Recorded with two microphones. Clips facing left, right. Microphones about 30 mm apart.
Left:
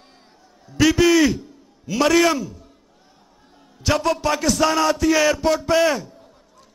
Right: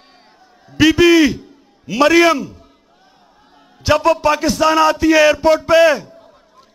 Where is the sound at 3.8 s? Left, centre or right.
Centre.